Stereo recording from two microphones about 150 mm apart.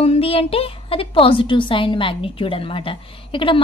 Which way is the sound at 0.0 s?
40° left (ahead or behind).